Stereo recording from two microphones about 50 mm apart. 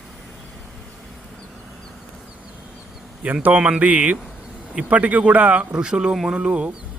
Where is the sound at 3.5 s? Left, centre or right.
Right.